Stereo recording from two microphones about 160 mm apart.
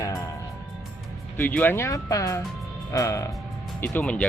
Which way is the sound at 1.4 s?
10° left (ahead or behind).